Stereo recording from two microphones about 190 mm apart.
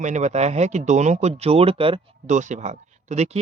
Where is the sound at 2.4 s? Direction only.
40° right (ahead or behind).